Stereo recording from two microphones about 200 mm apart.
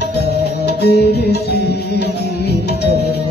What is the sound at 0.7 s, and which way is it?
Music, 55° left (ahead or behind).